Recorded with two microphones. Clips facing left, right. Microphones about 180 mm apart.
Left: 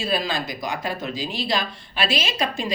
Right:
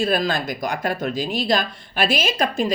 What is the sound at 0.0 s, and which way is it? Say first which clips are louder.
Speech: right 4 dB; 50° right (ahead or behind).